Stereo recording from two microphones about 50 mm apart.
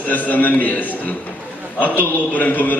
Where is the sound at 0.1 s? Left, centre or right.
Left.